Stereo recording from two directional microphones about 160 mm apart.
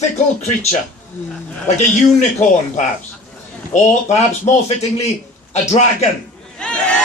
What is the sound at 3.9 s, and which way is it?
A man's voice, 50° left (ahead or behind).